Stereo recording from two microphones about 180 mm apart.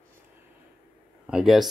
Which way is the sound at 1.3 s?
Centre (ahead or behind).